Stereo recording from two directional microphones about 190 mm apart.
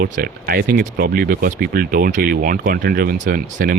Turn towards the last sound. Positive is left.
turn(degrees=-50)  # may be behind; listen again after turning